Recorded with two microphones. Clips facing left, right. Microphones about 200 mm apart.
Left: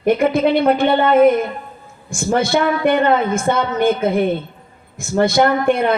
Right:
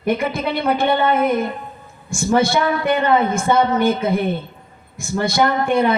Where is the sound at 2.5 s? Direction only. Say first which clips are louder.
Left 3 dB; 55° left (ahead or behind).